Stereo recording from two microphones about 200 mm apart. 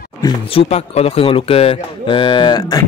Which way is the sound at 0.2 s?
30° left (ahead or behind).